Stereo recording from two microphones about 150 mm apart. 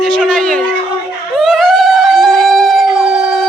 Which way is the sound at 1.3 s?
Centre (ahead or behind).